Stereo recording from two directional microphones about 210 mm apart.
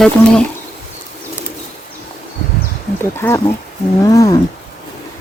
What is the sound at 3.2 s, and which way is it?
Speech, 15° left (ahead or behind).